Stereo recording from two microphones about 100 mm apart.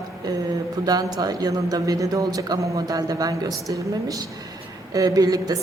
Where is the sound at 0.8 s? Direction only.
40° right (ahead or behind).